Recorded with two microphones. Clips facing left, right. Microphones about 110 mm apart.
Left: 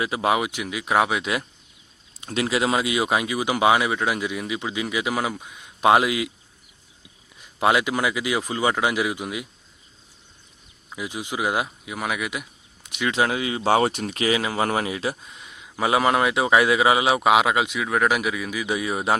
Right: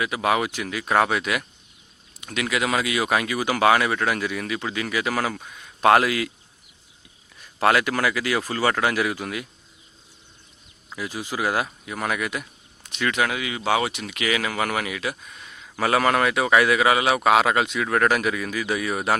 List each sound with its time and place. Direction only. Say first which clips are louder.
0.0 s speech: even; 25° left (ahead or behind)
0.4 s speech: even; 15° left (ahead or behind)
1.2 s speech: even; 25° left (ahead or behind)
7.3 s speech: even; 15° left (ahead or behind)
10.8 s speech: even; 15° left (ahead or behind)
13.1 s speech: left 2 dB; 25° left (ahead or behind)